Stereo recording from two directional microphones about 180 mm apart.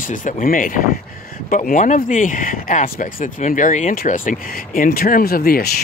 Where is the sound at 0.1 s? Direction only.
45° left (ahead or behind).